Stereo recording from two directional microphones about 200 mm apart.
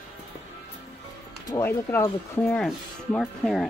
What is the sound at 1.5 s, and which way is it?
Speech, 10° left (ahead or behind).